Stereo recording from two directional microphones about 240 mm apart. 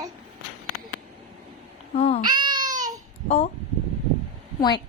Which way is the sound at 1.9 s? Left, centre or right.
Left.